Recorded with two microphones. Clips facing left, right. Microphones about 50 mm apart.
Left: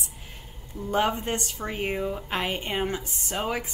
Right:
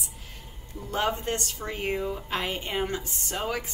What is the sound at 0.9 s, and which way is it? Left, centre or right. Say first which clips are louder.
A woman's voice: left 3 dB; centre.